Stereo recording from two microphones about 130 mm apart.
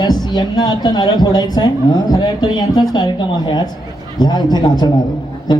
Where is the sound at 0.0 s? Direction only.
35° left (ahead or behind).